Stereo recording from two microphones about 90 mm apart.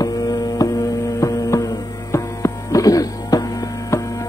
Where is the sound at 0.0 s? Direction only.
40° left (ahead or behind).